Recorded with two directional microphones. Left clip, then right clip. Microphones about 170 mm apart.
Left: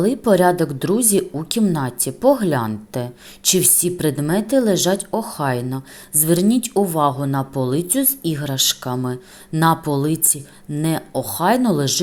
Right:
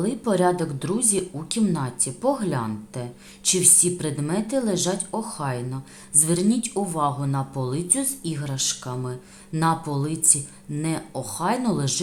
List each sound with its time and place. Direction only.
0.0 s a woman's voice: 30° left (ahead or behind)